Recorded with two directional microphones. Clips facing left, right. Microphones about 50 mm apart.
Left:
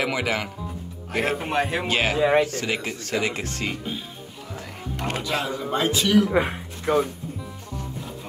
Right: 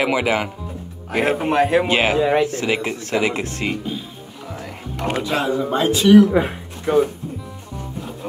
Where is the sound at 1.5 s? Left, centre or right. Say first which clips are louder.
Right 8 dB; centre.